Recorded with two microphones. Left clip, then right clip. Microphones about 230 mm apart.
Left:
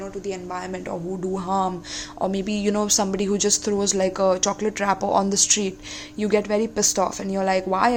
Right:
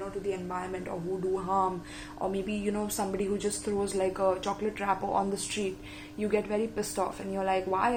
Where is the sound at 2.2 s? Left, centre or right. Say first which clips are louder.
Left 7 dB; left.